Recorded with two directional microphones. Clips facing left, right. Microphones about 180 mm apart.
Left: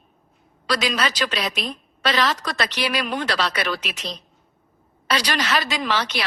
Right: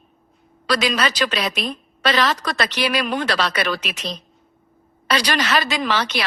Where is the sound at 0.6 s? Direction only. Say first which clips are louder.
Right 3 dB; 60° right (ahead or behind).